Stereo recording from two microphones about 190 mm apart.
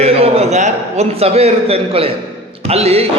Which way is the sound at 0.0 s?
35° right (ahead or behind).